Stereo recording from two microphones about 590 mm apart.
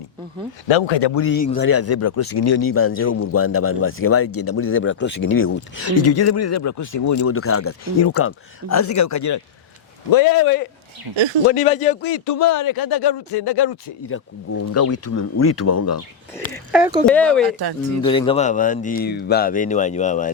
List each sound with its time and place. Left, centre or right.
0.7 s speech: left
1.1 s a man's voice: centre
11.1 s speech: right
11.4 s speech: centre
12.1 s speech: left
14.6 s a man's voice: left
16.7 s speech: centre